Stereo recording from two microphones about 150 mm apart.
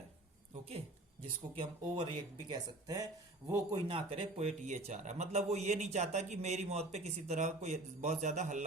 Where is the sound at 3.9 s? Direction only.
40° right (ahead or behind).